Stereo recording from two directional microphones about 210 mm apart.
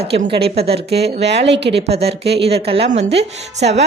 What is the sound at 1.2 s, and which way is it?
A woman's voice, 55° right (ahead or behind).